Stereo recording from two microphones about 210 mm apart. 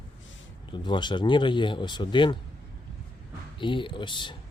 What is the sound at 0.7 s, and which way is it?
Speech, 20° left (ahead or behind).